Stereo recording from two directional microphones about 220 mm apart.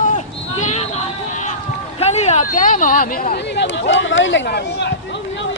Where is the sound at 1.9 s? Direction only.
30° left (ahead or behind).